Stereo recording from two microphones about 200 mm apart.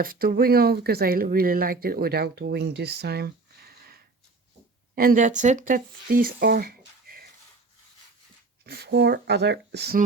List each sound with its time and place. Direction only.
0.0 s speech: 45° right (ahead or behind)
4.9 s speech: 45° right (ahead or behind)
8.6 s speech: 50° right (ahead or behind)